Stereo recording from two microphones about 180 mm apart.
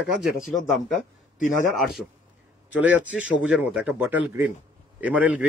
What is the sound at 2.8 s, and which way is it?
A man's voice, 10° right (ahead or behind).